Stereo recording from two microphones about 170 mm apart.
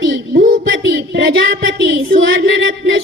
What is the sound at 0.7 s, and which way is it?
Child singing, 90° right.